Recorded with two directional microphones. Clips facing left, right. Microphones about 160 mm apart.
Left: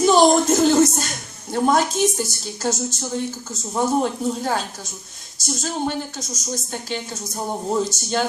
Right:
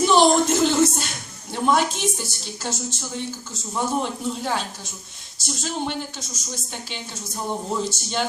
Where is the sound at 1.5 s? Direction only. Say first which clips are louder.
Left 3 dB; 45° left (ahead or behind).